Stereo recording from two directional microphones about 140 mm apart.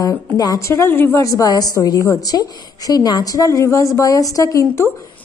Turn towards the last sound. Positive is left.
turn(degrees=25)  # may be behind; listen again after turning